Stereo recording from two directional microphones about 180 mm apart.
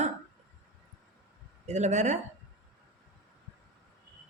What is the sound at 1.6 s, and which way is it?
Speech, 40° right (ahead or behind).